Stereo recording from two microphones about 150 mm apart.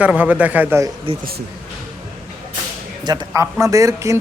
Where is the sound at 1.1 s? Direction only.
35° right (ahead or behind).